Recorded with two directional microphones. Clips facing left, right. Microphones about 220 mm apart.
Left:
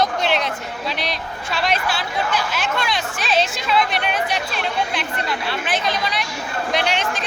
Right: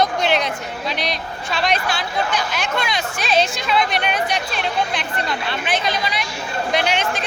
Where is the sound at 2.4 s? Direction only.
5° left (ahead or behind).